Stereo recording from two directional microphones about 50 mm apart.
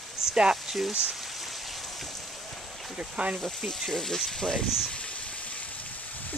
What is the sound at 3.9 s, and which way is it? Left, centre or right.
Speech, centre.